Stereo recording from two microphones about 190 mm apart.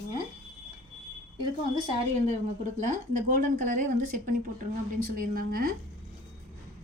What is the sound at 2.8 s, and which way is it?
Speech, 45° right (ahead or behind).